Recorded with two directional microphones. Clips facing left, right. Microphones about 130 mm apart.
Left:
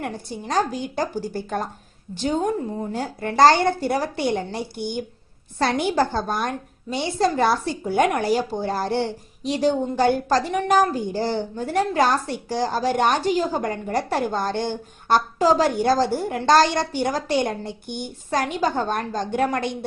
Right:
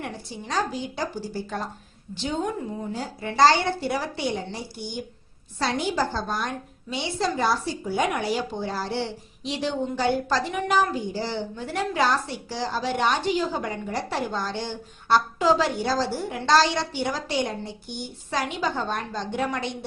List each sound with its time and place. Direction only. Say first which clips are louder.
0.0 s a woman's voice: left 4 dB; 50° left (ahead or behind)
2.9 s a woman's voice: left 5 dB; 55° left (ahead or behind)